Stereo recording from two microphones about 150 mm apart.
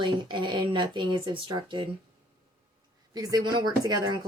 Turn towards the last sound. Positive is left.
turn(degrees=-30)  # may be behind; listen again after turning